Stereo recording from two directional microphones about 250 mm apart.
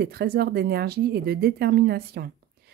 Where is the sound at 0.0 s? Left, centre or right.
Right.